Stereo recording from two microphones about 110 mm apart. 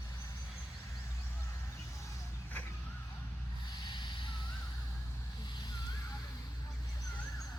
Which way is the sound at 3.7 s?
45° left (ahead or behind).